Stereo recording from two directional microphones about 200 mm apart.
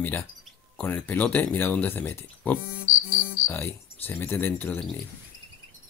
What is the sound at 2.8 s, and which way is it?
Insect, 40° left (ahead or behind).